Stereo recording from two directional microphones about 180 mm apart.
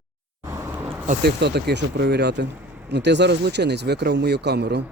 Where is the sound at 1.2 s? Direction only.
70° right (ahead or behind).